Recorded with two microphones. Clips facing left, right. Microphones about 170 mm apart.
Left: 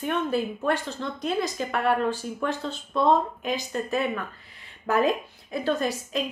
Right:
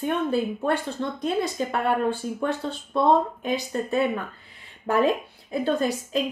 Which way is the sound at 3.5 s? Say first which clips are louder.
Right 2 dB; 35° right (ahead or behind).